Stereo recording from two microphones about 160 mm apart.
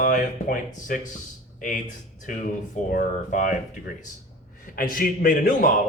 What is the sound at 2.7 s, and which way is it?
Speech, 55° left (ahead or behind).